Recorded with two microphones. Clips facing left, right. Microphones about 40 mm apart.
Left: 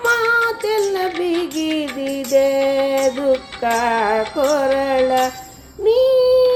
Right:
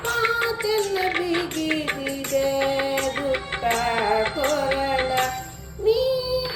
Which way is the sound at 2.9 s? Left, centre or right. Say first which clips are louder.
Left 7 dB; right.